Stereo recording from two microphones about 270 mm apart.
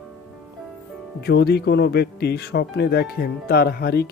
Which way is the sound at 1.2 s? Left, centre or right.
Left.